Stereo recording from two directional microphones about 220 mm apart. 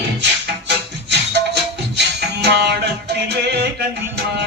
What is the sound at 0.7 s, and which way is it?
Music, 50° right (ahead or behind).